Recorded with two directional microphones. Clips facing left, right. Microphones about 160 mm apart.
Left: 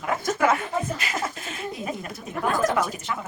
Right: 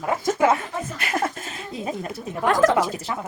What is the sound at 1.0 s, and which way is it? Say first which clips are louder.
Speech: right 4 dB; 60° right (ahead or behind).